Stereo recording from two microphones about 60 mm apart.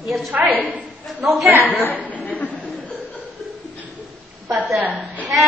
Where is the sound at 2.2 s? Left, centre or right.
Left.